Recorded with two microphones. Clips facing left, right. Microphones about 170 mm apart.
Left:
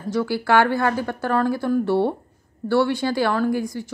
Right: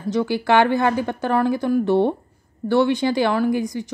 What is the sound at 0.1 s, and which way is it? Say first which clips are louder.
Speech: right 1 dB; 20° right (ahead or behind).